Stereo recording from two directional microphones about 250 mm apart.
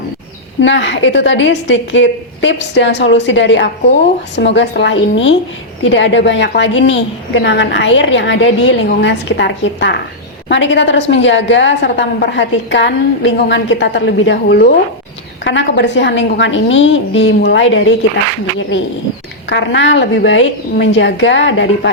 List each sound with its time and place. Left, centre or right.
0.6 s a woman's voice: left
19.5 s a woman's voice: left